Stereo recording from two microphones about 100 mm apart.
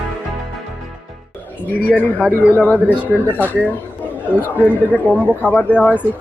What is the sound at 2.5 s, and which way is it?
Speech, 20° left (ahead or behind).